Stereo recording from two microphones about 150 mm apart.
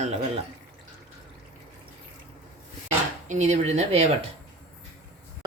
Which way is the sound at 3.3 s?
50° right (ahead or behind).